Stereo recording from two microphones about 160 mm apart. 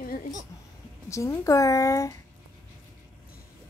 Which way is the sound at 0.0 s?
65° left (ahead or behind).